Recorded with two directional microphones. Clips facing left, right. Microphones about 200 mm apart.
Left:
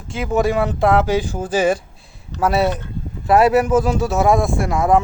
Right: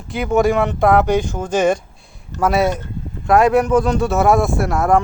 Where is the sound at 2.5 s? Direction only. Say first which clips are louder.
Right 1 dB; centre (ahead or behind).